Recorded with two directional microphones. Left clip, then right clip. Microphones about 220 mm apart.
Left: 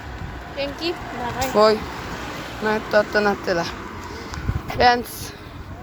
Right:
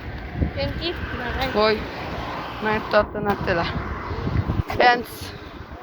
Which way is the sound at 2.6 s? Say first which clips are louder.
Left 1 dB; 15° left (ahead or behind).